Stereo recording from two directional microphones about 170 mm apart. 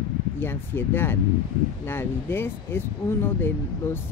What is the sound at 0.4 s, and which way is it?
Speech, 15° left (ahead or behind).